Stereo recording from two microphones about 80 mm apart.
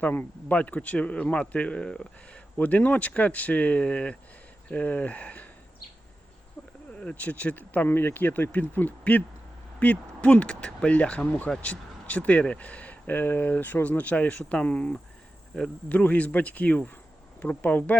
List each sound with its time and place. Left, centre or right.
0.0 s speech: left
7.0 s speech: centre